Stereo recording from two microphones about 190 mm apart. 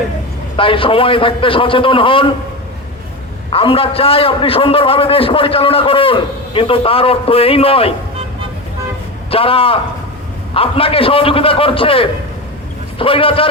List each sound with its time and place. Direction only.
0.5 s a man's voice: 25° left (ahead or behind)
3.5 s a man's voice: 30° left (ahead or behind)
9.3 s a man's voice: 30° left (ahead or behind)